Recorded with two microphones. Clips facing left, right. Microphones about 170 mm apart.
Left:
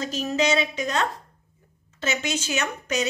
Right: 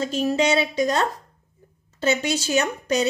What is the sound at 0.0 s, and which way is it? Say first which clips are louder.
Speech: right 3 dB; 30° right (ahead or behind).